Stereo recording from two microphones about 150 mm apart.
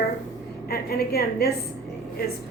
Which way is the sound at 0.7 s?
90° left.